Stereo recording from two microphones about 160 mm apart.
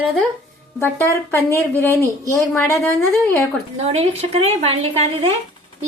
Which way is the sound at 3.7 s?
40° right (ahead or behind).